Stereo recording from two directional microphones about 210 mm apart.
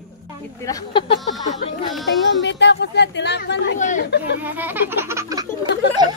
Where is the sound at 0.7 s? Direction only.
20° left (ahead or behind).